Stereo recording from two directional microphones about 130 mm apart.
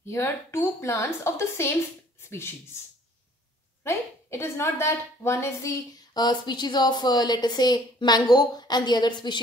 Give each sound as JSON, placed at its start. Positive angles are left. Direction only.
{"t": 0.1, "sound": "a woman's voice", "side_deg": 20}
{"t": 3.8, "sound": "a woman's voice", "side_deg": 20}